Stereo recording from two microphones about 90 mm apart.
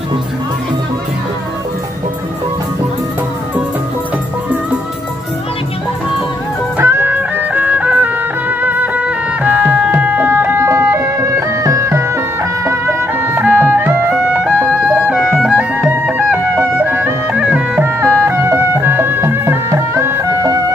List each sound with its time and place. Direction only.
6.8 s music: 25° right (ahead or behind)
15.4 s music: 10° right (ahead or behind)
17.8 s music: 25° right (ahead or behind)